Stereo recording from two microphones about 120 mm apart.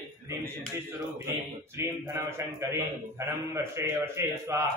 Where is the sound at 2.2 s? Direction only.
20° right (ahead or behind).